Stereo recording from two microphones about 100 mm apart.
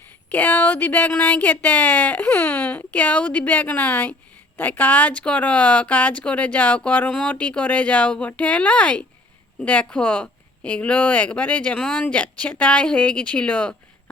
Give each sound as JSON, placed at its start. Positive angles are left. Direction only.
{"t": 0.3, "sound": "speech", "side_deg": 20}